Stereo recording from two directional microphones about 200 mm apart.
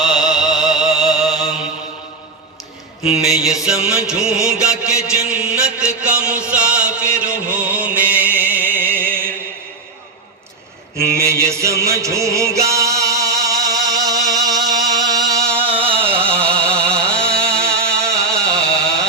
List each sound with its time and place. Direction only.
0.0 s music: centre (ahead or behind)
3.2 s music: centre (ahead or behind)
5.5 s chant: 5° right (ahead or behind)
11.2 s music: 15° right (ahead or behind)
16.0 s a sound: 10° right (ahead or behind)
16.2 s a sound: 5° left (ahead or behind)